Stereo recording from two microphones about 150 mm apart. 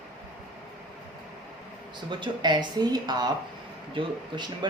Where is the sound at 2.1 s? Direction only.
30° right (ahead or behind).